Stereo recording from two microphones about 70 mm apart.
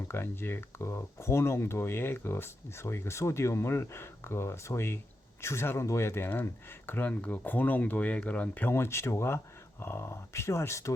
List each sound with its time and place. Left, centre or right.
0.1 s speech: left
8.7 s speech: left